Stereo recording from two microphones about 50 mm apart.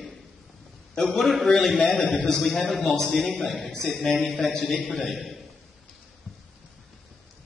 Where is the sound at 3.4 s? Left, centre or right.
Centre.